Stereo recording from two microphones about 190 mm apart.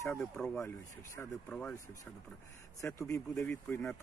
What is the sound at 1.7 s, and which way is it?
Speech, 15° left (ahead or behind).